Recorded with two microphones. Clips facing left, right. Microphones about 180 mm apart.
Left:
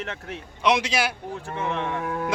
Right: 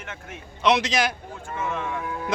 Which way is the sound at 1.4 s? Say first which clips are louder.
Left 1 dB; 30° left (ahead or behind).